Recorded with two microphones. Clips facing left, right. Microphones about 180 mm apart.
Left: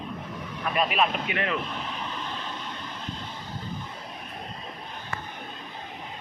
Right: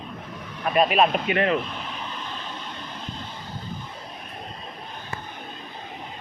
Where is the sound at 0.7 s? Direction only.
45° right (ahead or behind).